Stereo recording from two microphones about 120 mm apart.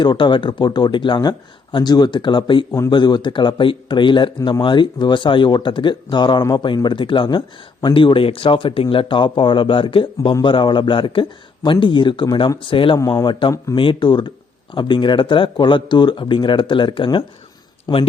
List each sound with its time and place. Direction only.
0.0 s speech: 40° left (ahead or behind)
13.0 s speech: 35° left (ahead or behind)